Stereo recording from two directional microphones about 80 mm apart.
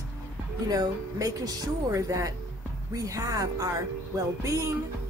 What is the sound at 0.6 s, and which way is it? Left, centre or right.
Speech, right.